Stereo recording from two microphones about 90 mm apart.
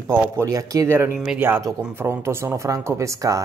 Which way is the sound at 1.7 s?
30° right (ahead or behind).